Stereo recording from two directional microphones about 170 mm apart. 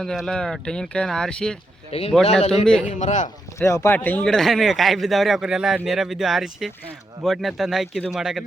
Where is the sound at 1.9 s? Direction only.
35° left (ahead or behind).